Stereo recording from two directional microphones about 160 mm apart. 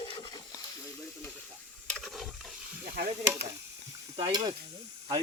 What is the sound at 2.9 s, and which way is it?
Speech, 80° right.